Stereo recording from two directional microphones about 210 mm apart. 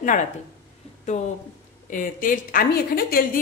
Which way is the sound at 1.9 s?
40° left (ahead or behind).